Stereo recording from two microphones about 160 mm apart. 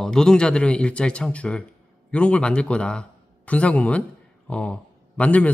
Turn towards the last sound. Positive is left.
turn(degrees=10)  # may be behind; listen again after turning